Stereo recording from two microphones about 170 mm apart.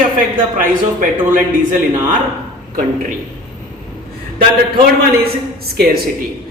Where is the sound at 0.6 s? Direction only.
55° right (ahead or behind).